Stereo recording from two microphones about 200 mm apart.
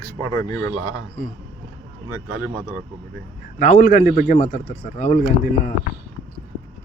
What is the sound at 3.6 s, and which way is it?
A man's voice, 40° left (ahead or behind).